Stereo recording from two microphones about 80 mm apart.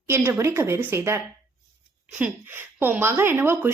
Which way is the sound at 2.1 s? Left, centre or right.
Right.